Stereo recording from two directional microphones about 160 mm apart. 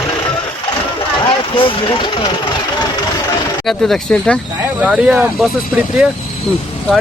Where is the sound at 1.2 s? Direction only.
35° left (ahead or behind).